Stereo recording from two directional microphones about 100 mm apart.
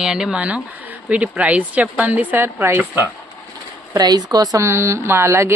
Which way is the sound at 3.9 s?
45° right (ahead or behind).